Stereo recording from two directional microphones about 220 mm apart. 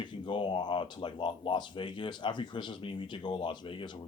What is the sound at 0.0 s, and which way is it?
Speech, 20° left (ahead or behind).